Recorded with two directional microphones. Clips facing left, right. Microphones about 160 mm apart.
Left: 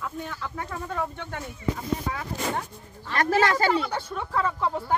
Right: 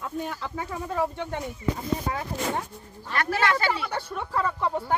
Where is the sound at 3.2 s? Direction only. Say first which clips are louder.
Left 3 dB; 40° left (ahead or behind).